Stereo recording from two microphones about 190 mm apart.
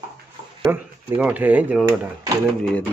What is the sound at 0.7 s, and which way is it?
Speech, 10° right (ahead or behind).